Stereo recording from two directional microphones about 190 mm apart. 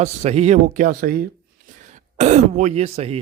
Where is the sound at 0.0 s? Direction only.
35° right (ahead or behind).